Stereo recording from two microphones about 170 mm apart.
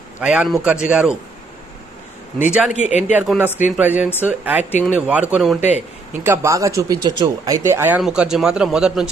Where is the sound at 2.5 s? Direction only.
5° right (ahead or behind).